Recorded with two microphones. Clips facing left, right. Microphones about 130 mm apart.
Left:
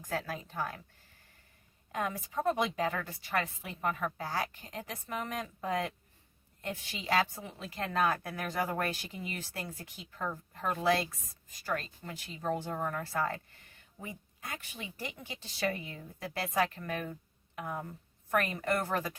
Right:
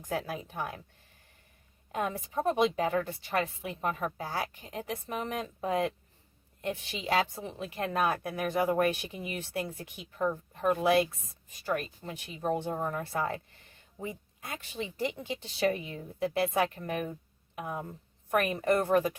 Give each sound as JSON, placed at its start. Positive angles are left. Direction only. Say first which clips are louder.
{"t": 0.0, "sound": "speech", "louder": "right 3 dB", "side_deg": -15}
{"t": 1.9, "sound": "speech", "louder": "right 3 dB", "side_deg": -20}